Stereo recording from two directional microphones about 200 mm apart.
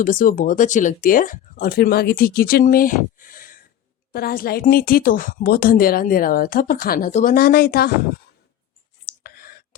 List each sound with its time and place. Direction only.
0.0 s speech: 40° left (ahead or behind)
7.3 s speech: 50° left (ahead or behind)
9.0 s clicking: 50° left (ahead or behind)